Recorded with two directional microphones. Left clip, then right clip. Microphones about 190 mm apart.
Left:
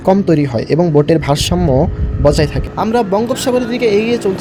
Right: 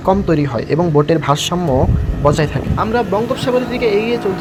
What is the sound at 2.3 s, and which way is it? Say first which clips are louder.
Speech: left 2 dB; 45° left (ahead or behind).